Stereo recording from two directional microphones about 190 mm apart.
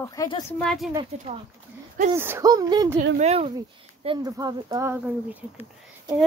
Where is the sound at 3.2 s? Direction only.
35° right (ahead or behind).